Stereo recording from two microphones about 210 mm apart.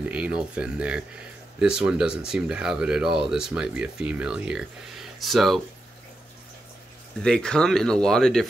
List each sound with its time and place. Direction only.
0.0 s speech: 5° right (ahead or behind)
7.2 s speech: 5° left (ahead or behind)